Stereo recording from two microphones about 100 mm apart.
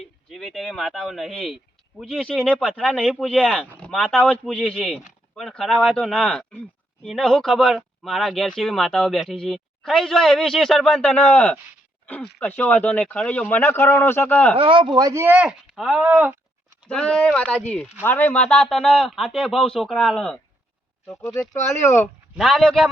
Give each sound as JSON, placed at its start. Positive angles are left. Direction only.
{"t": 0.3, "sound": "speech", "side_deg": 0}
{"t": 14.5, "sound": "speech", "side_deg": -60}
{"t": 14.9, "sound": "speech", "side_deg": -30}
{"t": 15.3, "sound": "speech", "side_deg": -10}
{"t": 16.9, "sound": "speech", "side_deg": 5}
{"t": 21.2, "sound": "speech", "side_deg": 30}
{"t": 22.4, "sound": "speech", "side_deg": 0}